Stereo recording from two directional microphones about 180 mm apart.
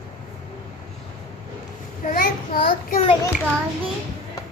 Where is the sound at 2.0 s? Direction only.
50° left (ahead or behind).